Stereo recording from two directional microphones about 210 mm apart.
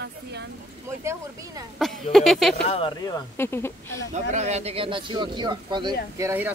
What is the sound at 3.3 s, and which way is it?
Speech, 10° left (ahead or behind).